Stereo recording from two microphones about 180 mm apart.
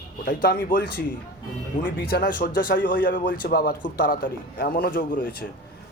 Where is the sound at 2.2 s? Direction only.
50° left (ahead or behind).